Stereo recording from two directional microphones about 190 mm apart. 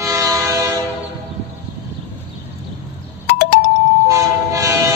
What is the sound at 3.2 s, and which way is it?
Doorbell, 60° left (ahead or behind).